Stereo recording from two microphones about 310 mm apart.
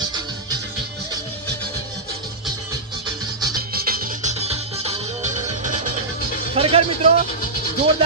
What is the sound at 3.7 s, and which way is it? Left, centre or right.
Music, right.